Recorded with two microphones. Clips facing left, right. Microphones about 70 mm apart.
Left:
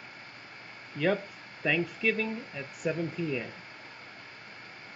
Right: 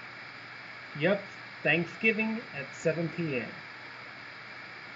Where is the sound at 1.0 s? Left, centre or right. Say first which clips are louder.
Left 1 dB; right.